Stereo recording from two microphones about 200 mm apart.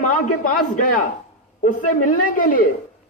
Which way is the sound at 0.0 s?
40° left (ahead or behind).